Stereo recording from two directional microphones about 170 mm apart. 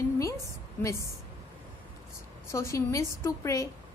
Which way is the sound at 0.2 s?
20° left (ahead or behind).